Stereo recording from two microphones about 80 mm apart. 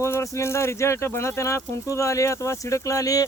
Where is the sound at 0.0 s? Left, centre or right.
Left.